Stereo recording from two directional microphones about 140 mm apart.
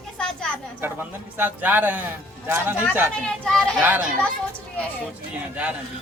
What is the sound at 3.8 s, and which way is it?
Speech, 15° right (ahead or behind).